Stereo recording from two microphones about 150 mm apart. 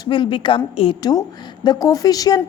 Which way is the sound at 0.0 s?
35° left (ahead or behind).